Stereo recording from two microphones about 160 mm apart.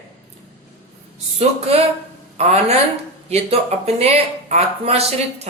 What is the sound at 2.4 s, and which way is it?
A woman's voice, 40° right (ahead or behind).